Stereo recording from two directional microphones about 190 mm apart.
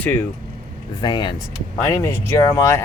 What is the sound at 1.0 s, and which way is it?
Speech, 25° left (ahead or behind).